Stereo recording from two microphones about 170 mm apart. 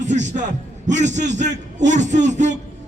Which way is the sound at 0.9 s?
45° right (ahead or behind).